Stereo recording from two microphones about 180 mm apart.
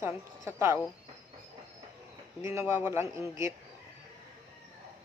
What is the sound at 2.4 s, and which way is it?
Speech, 15° right (ahead or behind).